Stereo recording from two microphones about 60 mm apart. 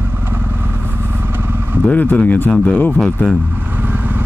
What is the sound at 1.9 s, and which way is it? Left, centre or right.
Speech, left.